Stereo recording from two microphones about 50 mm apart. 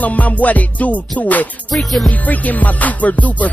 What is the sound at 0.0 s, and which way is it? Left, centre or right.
Music, left.